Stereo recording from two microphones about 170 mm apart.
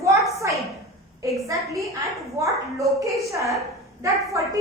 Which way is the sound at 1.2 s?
20° right (ahead or behind).